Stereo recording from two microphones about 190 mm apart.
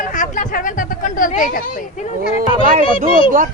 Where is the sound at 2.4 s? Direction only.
45° right (ahead or behind).